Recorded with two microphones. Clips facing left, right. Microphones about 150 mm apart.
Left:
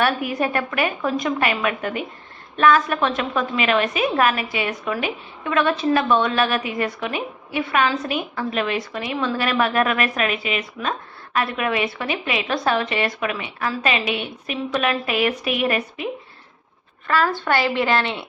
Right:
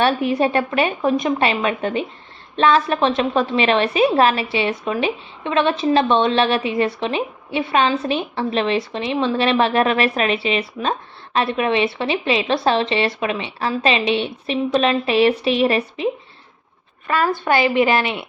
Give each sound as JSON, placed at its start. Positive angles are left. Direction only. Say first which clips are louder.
{"t": 0.0, "sound": "a woman's voice", "louder": "right 4 dB", "side_deg": -25}
{"t": 17.1, "sound": "a woman's voice", "louder": "right 2 dB", "side_deg": -15}